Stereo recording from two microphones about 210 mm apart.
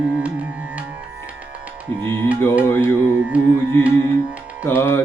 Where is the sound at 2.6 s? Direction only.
10° left (ahead or behind).